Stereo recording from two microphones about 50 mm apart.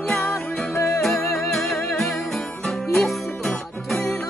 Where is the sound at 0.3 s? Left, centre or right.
Left.